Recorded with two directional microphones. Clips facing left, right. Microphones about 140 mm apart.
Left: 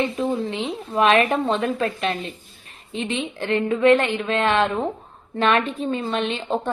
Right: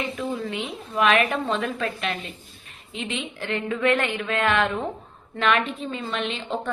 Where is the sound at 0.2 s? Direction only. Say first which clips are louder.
Left 5 dB; 25° left (ahead or behind).